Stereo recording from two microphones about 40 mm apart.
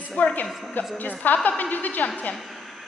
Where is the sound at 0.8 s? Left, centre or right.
Left.